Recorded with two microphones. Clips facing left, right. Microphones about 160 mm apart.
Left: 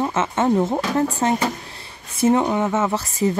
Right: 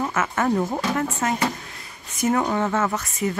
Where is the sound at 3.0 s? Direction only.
30° left (ahead or behind).